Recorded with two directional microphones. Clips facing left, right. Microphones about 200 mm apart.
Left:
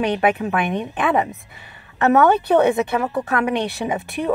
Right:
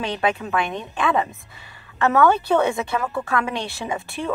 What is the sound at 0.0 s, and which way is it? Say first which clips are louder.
A woman's voice: left 5 dB; 20° left (ahead or behind).